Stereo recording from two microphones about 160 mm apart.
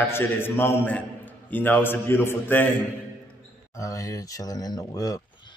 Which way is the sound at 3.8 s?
20° left (ahead or behind).